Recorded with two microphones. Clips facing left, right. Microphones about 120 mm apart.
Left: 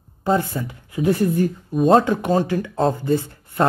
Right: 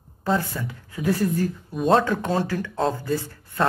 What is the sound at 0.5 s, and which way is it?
Speech, 20° left (ahead or behind).